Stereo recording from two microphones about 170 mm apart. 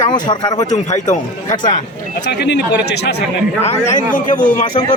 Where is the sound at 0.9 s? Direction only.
45° left (ahead or behind).